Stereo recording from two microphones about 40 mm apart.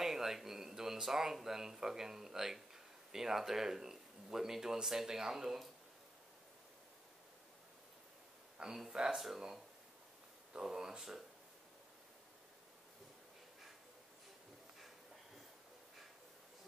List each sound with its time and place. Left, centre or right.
0.0 s speech: centre
8.6 s speech: right
8.9 s speech: centre
10.5 s speech: centre